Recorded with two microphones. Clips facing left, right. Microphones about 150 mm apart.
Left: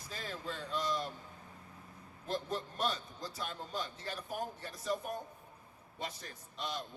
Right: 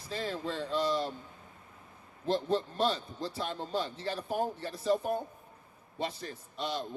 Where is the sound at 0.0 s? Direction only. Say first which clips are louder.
Right 8 dB; 30° right (ahead or behind).